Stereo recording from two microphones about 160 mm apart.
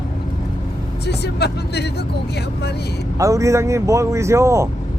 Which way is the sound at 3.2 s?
20° right (ahead or behind).